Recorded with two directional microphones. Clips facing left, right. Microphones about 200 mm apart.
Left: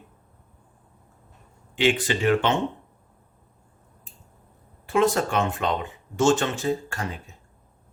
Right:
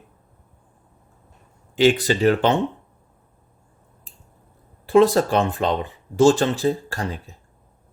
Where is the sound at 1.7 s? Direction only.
40° right (ahead or behind).